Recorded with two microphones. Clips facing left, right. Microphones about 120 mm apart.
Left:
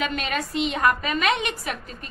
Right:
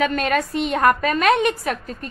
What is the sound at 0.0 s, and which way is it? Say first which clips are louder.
A woman's voice: right 7 dB; 45° right (ahead or behind).